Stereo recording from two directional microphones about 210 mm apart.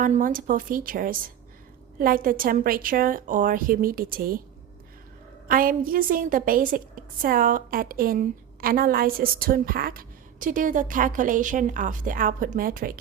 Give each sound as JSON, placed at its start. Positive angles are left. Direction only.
{"t": 0.0, "sound": "a woman's voice", "side_deg": -40}
{"t": 5.5, "sound": "a woman's voice", "side_deg": -45}